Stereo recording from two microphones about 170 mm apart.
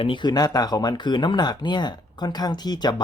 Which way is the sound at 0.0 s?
30° left (ahead or behind).